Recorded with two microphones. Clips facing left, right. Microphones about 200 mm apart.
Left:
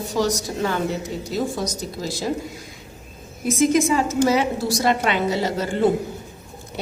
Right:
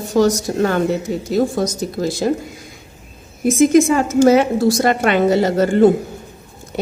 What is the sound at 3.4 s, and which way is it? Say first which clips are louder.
A woman's voice: right 6 dB; 45° right (ahead or behind).